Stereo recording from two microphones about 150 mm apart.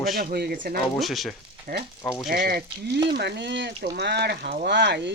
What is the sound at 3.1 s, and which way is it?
Speech, 90° right.